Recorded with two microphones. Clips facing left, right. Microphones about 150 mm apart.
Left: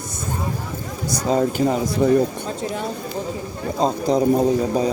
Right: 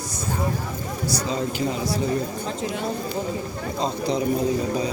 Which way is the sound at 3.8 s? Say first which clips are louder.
Left 6 dB; 40° left (ahead or behind).